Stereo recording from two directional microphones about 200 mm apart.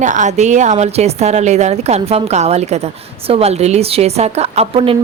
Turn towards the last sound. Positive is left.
turn(degrees=-30)  # may be behind; listen again after turning